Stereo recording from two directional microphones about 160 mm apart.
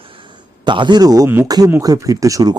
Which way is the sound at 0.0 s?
35° right (ahead or behind).